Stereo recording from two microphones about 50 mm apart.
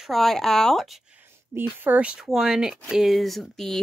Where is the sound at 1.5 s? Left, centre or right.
Right.